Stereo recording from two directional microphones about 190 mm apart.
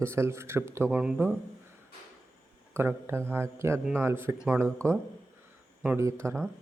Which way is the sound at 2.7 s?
10° right (ahead or behind).